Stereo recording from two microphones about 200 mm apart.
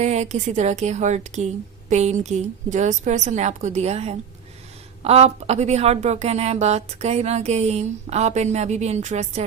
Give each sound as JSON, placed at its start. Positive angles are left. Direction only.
{"t": 0.0, "sound": "speech", "side_deg": -35}